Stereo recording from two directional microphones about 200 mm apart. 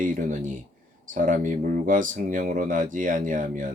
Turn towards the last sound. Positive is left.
turn(degrees=-40)  # may be behind; listen again after turning